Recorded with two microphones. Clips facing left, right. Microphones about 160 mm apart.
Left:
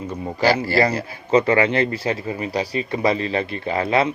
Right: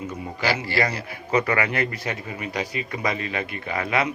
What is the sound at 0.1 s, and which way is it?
Speech, 35° left (ahead or behind).